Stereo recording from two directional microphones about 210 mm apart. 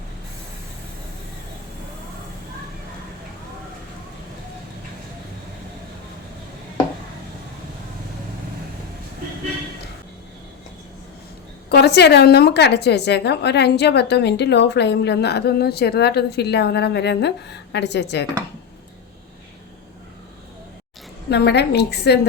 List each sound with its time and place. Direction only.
11.7 s a woman's voice: 50° left (ahead or behind)
21.2 s a woman's voice: 55° left (ahead or behind)